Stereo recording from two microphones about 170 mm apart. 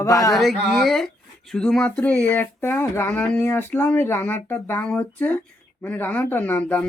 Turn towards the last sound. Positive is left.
turn(degrees=10)  # may be behind; listen again after turning